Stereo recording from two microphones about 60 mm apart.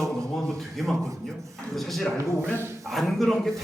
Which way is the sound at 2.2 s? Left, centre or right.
Right.